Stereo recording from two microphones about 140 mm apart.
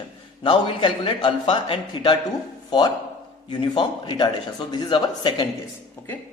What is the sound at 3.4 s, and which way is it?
A man's voice, 35° left (ahead or behind).